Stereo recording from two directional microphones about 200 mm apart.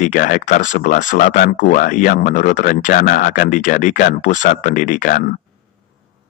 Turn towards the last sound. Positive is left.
turn(degrees=40)  # may be behind; listen again after turning